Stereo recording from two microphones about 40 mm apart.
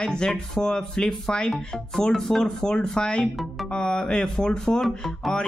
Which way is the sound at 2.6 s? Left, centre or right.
Centre.